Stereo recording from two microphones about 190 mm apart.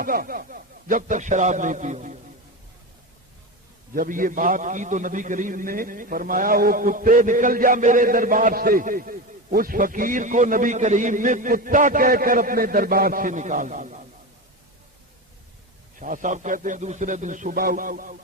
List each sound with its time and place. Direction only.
0.0 s a man's voice: 50° right (ahead or behind)
3.9 s a man's voice: 45° right (ahead or behind)
16.0 s a man's voice: 45° right (ahead or behind)